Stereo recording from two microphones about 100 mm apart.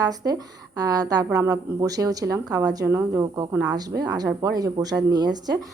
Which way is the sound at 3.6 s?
40° right (ahead or behind).